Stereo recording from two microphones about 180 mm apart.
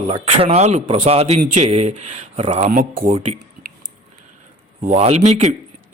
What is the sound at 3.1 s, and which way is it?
Speech, 40° right (ahead or behind).